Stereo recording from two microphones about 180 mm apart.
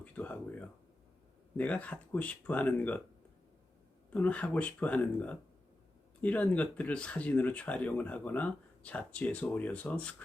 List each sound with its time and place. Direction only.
0.0 s speech: 5° left (ahead or behind)
4.1 s speech: 5° left (ahead or behind)